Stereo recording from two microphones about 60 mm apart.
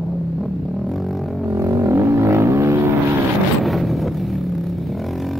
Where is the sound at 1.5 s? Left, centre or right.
Right.